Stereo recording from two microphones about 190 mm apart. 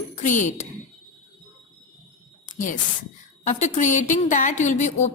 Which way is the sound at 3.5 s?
40° left (ahead or behind).